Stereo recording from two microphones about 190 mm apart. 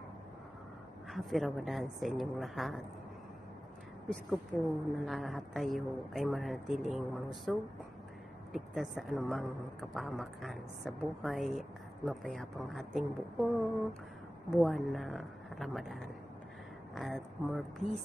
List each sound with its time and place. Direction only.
1.1 s a woman's voice: centre (ahead or behind)
4.5 s a woman's voice: centre (ahead or behind)